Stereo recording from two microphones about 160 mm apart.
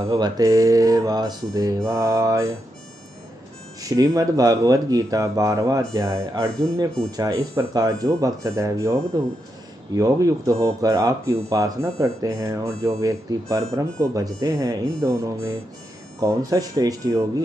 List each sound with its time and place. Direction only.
0.0 s speech: 20° right (ahead or behind)
3.9 s speech: 20° right (ahead or behind)
9.9 s speech: 20° right (ahead or behind)